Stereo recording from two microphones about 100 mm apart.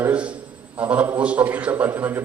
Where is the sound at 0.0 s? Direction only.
10° right (ahead or behind).